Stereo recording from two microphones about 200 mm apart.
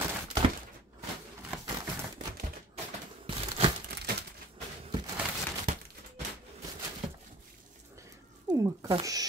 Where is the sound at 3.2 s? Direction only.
30° right (ahead or behind).